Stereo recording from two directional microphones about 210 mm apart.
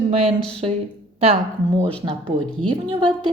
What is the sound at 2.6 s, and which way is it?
Speech, 25° right (ahead or behind).